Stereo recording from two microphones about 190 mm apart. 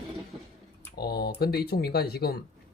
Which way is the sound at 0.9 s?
55° left (ahead or behind).